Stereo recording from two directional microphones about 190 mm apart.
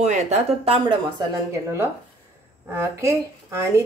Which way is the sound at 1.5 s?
15° right (ahead or behind).